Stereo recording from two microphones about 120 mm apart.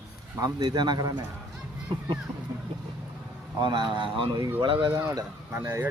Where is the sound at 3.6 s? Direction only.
40° right (ahead or behind).